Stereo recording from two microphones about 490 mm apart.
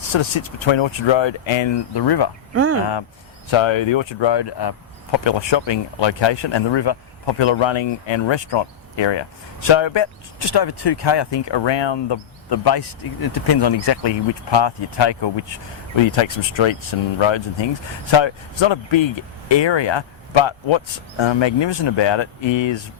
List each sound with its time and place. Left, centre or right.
0.1 s speech: left
2.5 s speech: right
3.5 s speech: left
22.4 s speech: left